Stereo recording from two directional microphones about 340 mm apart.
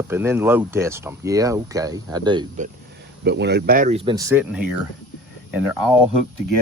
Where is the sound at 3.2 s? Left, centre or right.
Right; by 5.9 s centre.